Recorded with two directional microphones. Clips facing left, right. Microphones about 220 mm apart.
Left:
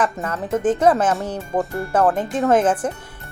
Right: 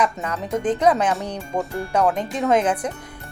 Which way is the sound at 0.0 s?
5° left (ahead or behind).